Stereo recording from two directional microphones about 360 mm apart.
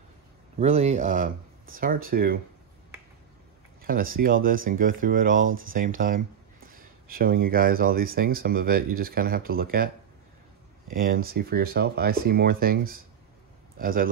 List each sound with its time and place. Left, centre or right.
0.6 s speech: centre
3.8 s speech: right
5.4 s speech: right
5.8 s speech: right
10.9 s speech: right